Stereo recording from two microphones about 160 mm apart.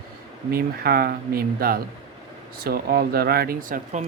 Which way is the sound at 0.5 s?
70° right (ahead or behind).